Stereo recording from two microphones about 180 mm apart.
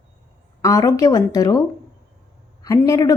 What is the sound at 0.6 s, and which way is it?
Speech, 20° left (ahead or behind).